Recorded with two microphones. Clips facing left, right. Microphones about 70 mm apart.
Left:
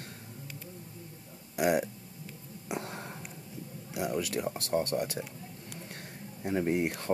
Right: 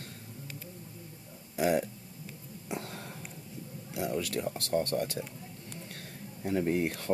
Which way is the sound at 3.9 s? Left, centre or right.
Centre.